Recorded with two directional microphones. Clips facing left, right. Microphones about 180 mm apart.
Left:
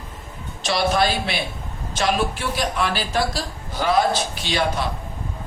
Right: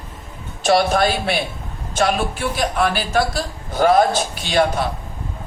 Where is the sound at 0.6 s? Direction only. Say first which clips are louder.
Right 4 dB; 50° right (ahead or behind).